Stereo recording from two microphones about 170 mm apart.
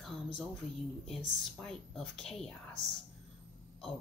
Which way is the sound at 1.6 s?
5° left (ahead or behind).